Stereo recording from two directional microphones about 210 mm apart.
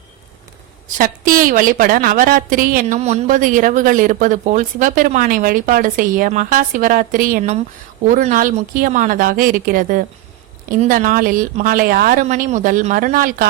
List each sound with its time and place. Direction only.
0.9 s a woman's voice: 40° right (ahead or behind)